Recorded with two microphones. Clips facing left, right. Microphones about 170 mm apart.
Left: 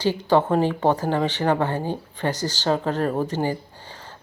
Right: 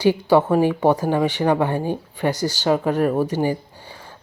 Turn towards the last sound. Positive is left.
turn(degrees=-10)  # may be behind; listen again after turning